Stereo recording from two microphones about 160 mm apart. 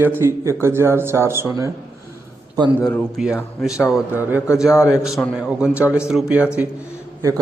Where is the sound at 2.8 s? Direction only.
15° left (ahead or behind).